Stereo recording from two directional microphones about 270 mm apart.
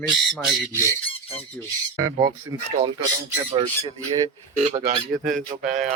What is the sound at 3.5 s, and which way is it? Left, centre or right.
Speech, right.